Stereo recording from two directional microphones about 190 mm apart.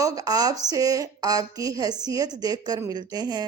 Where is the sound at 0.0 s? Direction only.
20° right (ahead or behind).